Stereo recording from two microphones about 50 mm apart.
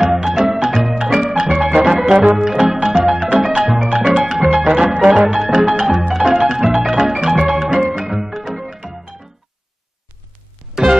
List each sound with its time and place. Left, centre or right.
0.0 s music: centre
1.8 s organ: centre
2.7 s music: centre
10.7 s music: centre